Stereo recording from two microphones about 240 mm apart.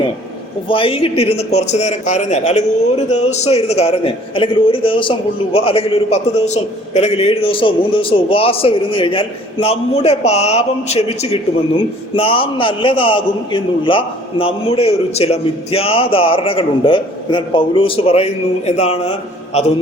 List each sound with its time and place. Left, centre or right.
0.7 s a man's voice: left